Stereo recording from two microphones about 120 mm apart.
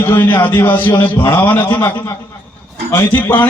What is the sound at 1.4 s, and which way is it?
Speech, 15° left (ahead or behind).